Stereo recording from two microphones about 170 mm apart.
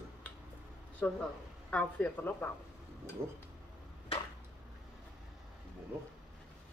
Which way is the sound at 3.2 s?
15° right (ahead or behind).